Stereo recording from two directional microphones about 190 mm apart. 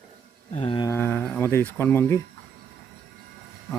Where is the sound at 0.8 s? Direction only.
10° left (ahead or behind).